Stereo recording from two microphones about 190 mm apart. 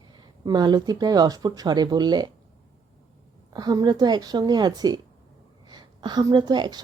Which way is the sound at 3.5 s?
20° right (ahead or behind).